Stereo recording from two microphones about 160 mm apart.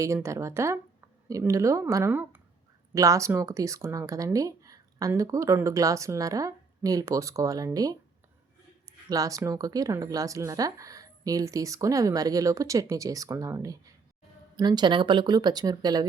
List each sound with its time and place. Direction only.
0.0 s speech: 20° right (ahead or behind)
9.0 s speech: 20° right (ahead or behind)